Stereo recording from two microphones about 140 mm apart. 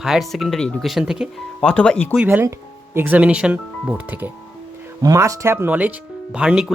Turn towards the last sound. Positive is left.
turn(degrees=-5)  # may be behind; listen again after turning